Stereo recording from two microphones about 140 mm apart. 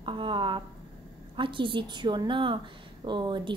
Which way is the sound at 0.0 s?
35° right (ahead or behind).